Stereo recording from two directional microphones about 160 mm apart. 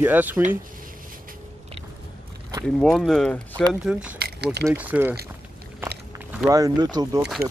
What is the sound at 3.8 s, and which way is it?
Speech, 5° right (ahead or behind).